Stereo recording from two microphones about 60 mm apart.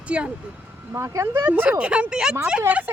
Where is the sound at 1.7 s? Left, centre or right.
Centre.